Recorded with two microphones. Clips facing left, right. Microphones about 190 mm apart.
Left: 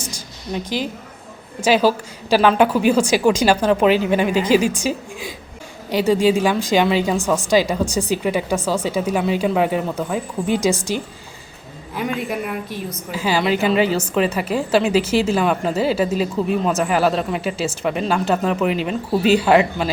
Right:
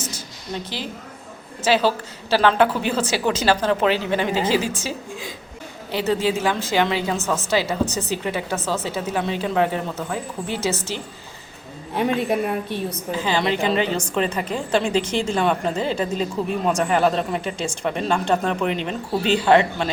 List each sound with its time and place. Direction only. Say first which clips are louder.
0.0 s a sound: left 1 dB; 15° left (ahead or behind)
1.6 s a woman's voice: left 3 dB; 15° left (ahead or behind)
11.9 s a woman's voice: right 3 dB; 30° right (ahead or behind)
13.1 s a woman's voice: left 3 dB; 10° left (ahead or behind)